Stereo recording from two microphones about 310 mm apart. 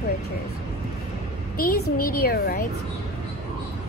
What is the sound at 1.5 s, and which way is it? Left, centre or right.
A woman's voice, left.